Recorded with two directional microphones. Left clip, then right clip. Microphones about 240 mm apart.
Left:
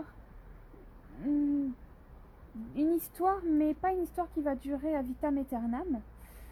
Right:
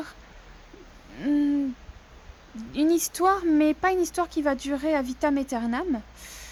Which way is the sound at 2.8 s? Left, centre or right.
Centre.